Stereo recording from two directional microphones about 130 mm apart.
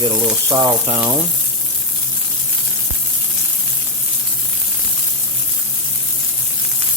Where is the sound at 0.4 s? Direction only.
30° right (ahead or behind).